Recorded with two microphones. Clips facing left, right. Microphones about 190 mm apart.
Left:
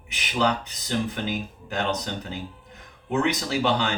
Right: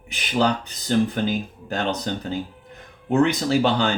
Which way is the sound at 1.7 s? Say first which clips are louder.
Right 2 dB; 35° right (ahead or behind).